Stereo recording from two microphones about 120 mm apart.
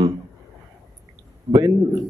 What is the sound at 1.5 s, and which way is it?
Speech, 30° right (ahead or behind).